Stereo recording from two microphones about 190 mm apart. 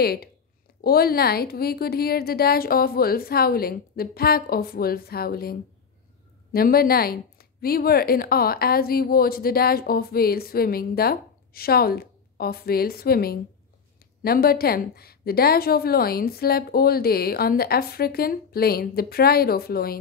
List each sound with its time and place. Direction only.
0.0 s a woman's voice: 55° left (ahead or behind)